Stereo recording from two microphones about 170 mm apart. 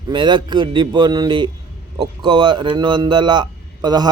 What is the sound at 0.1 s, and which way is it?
A man's voice, 25° right (ahead or behind).